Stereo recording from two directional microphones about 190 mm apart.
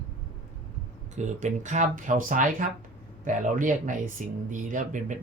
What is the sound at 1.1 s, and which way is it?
Speech, 40° right (ahead or behind).